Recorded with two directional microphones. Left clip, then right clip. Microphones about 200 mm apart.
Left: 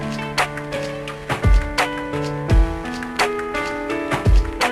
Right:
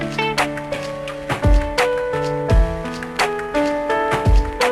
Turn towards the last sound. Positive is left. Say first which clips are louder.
# right 2 dB
turn(degrees=0)  # may be behind; listen again after turning